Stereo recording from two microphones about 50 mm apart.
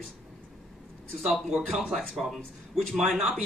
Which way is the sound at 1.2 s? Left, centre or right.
Centre.